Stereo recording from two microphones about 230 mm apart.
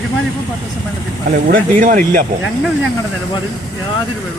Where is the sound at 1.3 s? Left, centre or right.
Right.